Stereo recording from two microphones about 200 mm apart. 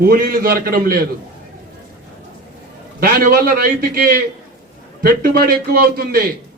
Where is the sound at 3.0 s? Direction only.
45° right (ahead or behind).